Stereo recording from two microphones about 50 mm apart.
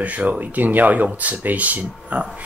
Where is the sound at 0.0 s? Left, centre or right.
Right.